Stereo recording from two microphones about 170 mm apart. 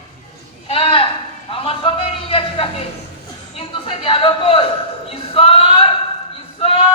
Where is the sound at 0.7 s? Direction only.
30° left (ahead or behind).